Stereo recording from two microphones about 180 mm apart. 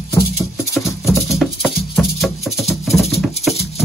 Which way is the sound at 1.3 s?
Centre (ahead or behind).